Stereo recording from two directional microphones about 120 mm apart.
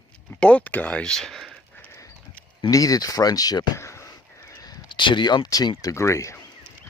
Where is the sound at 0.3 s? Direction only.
10° left (ahead or behind).